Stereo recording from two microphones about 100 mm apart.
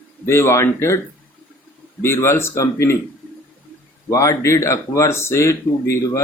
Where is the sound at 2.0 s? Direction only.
25° left (ahead or behind).